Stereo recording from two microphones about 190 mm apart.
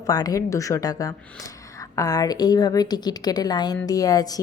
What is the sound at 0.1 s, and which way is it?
A woman's voice, 20° left (ahead or behind).